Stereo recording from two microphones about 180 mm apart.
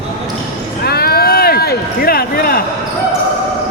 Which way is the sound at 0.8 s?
60° left (ahead or behind).